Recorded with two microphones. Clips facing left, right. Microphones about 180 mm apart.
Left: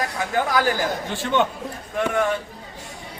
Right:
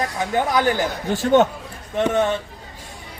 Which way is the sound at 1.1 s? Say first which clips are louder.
Right 7 dB; 40° right (ahead or behind).